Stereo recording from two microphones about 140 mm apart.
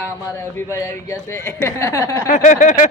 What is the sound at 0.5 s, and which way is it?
Speech, 20° left (ahead or behind).